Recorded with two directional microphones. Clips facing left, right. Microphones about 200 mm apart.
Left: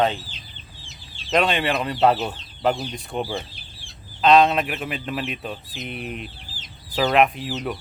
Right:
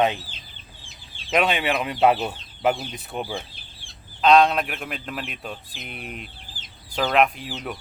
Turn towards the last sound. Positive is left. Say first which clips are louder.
# left 5 dB
turn(degrees=0)  # may be behind; listen again after turning